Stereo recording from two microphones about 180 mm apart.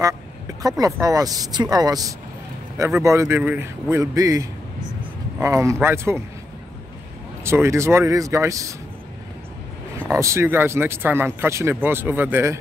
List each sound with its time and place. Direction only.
0.6 s speech: 20° right (ahead or behind)
7.4 s speech: 15° right (ahead or behind)
10.1 s speech: 15° right (ahead or behind)